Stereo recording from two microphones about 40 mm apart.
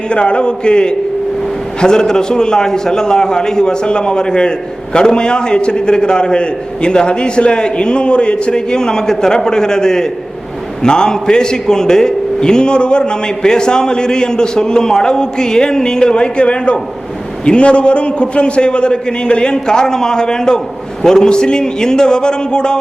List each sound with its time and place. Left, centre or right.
0.1 s a man's voice: left